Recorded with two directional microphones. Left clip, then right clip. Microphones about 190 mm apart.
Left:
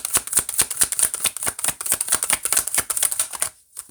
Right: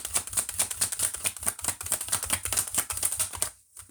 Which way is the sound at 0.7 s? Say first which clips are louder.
Left 7 dB; 25° left (ahead or behind).